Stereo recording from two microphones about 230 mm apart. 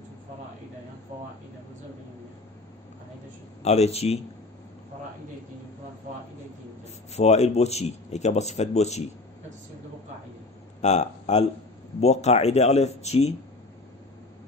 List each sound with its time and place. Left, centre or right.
3.6 s speech: left
7.2 s speech: left
10.8 s speech: left